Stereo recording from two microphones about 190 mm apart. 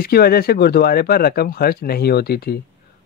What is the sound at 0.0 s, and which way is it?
Speech, 55° left (ahead or behind).